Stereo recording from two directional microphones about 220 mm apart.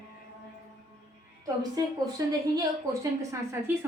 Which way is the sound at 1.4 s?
15° right (ahead or behind).